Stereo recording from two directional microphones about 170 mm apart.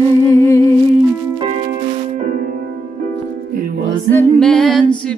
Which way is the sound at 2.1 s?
60° right (ahead or behind).